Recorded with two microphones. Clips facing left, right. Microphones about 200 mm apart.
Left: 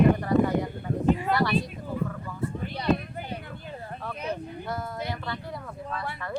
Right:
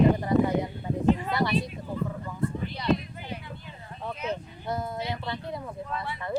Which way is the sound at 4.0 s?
20° right (ahead or behind).